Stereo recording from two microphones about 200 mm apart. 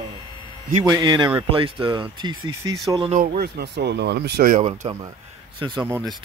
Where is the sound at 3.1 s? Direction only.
45° right (ahead or behind).